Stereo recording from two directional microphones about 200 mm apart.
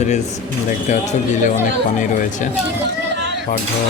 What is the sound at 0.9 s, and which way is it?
Speech, 35° left (ahead or behind).